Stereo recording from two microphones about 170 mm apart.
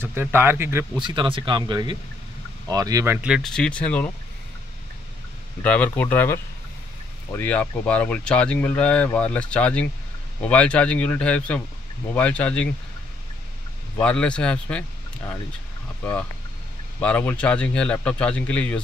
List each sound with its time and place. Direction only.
0.0 s speech: 15° right (ahead or behind)
0.9 s speech: 30° right (ahead or behind)
3.2 s speech: 5° right (ahead or behind)
5.6 s speech: 10° left (ahead or behind)
13.9 s speech: 5° left (ahead or behind)